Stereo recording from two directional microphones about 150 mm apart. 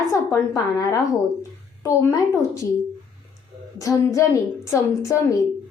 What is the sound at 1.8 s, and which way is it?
Speech, 20° left (ahead or behind).